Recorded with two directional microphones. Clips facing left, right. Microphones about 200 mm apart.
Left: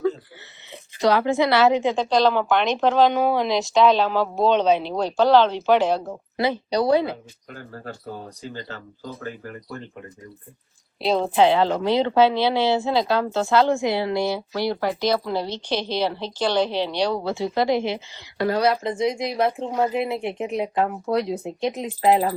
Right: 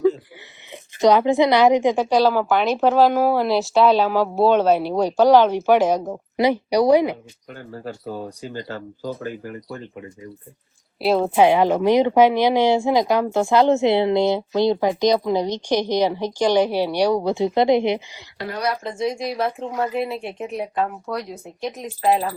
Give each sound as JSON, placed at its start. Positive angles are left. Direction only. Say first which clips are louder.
{"t": 0.7, "sound": "a woman's voice", "louder": "right 4 dB", "side_deg": -20}
{"t": 11.0, "sound": "a woman's voice", "louder": "right 2 dB", "side_deg": -5}
{"t": 18.5, "sound": "speech", "louder": "left 3 dB", "side_deg": 25}